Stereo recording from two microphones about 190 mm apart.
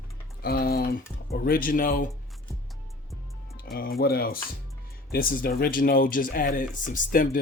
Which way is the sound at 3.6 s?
50° left (ahead or behind).